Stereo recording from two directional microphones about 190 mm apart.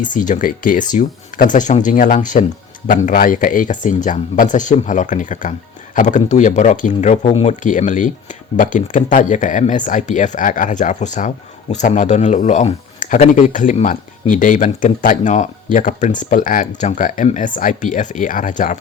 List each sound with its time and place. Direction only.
0.0 s speech: 40° left (ahead or behind)